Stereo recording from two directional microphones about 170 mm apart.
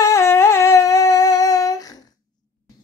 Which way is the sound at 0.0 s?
15° left (ahead or behind).